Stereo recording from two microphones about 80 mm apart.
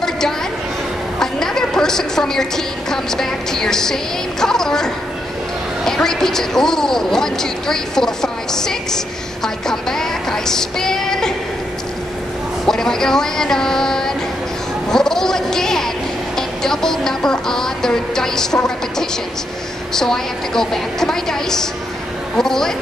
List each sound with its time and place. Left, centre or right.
1.2 s a woman's voice: centre
12.6 s a man's voice: centre